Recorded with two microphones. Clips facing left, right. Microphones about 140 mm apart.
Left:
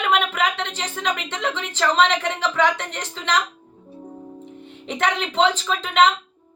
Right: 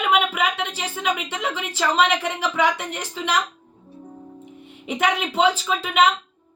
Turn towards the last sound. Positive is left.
turn(degrees=-10)  # may be behind; listen again after turning